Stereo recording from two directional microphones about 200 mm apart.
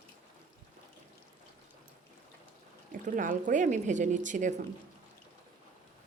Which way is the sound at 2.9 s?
40° right (ahead or behind).